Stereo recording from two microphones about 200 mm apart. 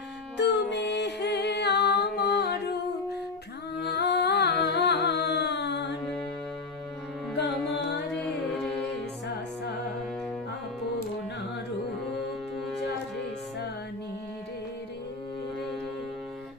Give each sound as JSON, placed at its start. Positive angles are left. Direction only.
{"t": 0.3, "sound": "music", "side_deg": 60}